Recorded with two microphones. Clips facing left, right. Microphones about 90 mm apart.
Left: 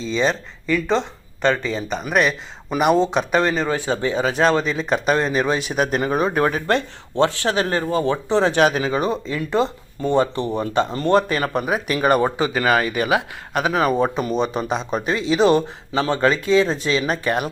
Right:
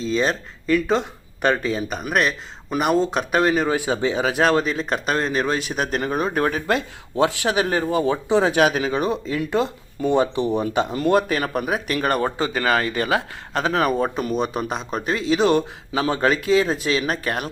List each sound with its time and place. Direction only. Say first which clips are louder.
0.0 s speech: left 1 dB; 5° right (ahead or behind)
10.1 s speech: even; 15° right (ahead or behind); by 12.2 s 5° left (ahead or behind)
12.2 s speech: left 2 dB; 20° left (ahead or behind)
14.2 s speech: left 2 dB; centre (ahead or behind)